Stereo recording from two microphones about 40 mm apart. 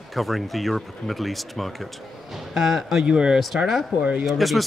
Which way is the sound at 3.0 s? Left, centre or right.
Right.